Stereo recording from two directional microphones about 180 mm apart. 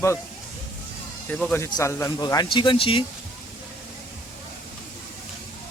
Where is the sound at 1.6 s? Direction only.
15° left (ahead or behind).